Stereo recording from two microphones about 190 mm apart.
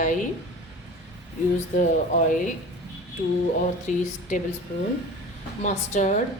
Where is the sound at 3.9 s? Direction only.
40° left (ahead or behind).